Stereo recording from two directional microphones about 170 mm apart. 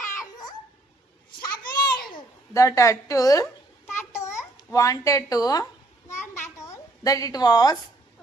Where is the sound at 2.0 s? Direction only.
20° left (ahead or behind).